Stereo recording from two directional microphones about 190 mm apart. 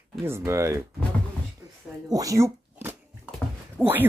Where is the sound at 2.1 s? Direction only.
15° right (ahead or behind).